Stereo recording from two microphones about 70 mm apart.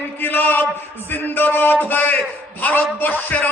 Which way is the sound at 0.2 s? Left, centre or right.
Left.